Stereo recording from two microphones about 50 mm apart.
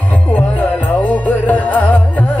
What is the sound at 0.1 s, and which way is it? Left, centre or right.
Music, left.